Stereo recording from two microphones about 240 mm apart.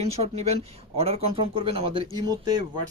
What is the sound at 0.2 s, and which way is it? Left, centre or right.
A man's voice, right.